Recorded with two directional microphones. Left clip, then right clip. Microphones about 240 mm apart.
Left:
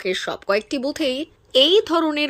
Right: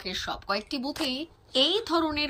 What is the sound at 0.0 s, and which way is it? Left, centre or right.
A woman's voice, centre.